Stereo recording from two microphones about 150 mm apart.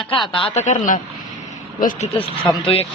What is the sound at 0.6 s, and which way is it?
Speech, 55° left (ahead or behind).